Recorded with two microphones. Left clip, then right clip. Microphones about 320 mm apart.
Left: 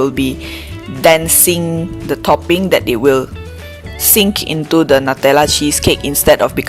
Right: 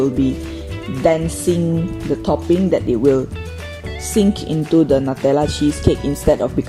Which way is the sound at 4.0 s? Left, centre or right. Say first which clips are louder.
Left 5 dB; left.